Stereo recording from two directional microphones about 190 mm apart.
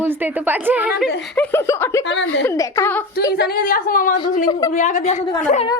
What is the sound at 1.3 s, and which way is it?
Speech, 10° left (ahead or behind).